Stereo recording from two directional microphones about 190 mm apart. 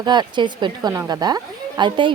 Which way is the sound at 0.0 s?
25° right (ahead or behind).